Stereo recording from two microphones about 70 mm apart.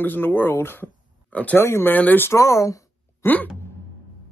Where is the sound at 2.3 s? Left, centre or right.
Left.